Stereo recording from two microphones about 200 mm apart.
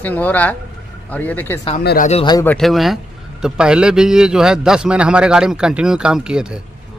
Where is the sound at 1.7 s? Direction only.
45° left (ahead or behind).